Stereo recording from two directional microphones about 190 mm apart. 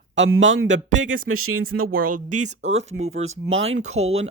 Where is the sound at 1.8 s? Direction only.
50° right (ahead or behind).